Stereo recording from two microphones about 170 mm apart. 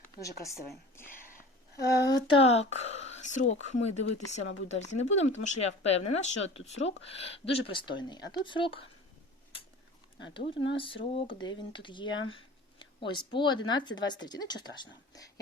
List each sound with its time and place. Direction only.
0.2 s speech: 20° left (ahead or behind)
0.9 s a sound: 10° left (ahead or behind)
1.7 s speech: 20° left (ahead or behind)
2.4 s speech: 40° left (ahead or behind)
10.3 s speech: 30° left (ahead or behind)